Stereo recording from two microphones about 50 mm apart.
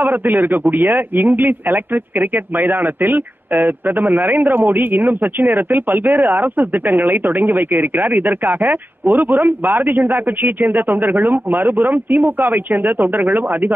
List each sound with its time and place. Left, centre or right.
0.0 s a man's voice: right